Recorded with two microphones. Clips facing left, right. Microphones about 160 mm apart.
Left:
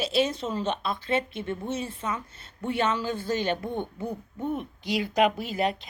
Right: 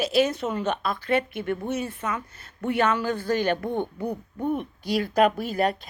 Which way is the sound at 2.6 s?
55° right (ahead or behind).